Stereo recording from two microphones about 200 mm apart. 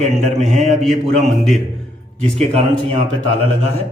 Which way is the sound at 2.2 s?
30° right (ahead or behind).